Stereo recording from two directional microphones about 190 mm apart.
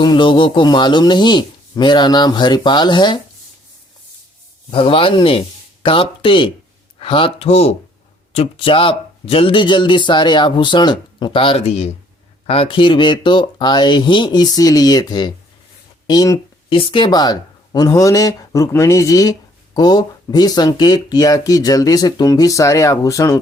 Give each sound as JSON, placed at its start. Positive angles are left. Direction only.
{"t": 0.0, "sound": "speech", "side_deg": 25}
{"t": 4.7, "sound": "speech", "side_deg": 30}
{"t": 16.0, "sound": "a sound", "side_deg": 20}
{"t": 16.7, "sound": "speech", "side_deg": 25}